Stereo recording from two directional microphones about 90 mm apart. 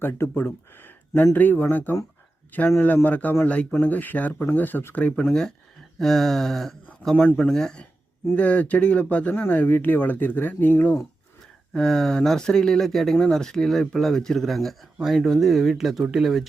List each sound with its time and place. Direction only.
0.0 s speech: 25° left (ahead or behind)
11.7 s speech: 5° left (ahead or behind)